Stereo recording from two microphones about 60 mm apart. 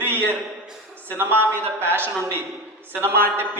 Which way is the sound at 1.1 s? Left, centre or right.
Right.